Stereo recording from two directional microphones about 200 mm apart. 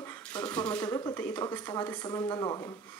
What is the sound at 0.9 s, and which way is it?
Speech, 20° left (ahead or behind).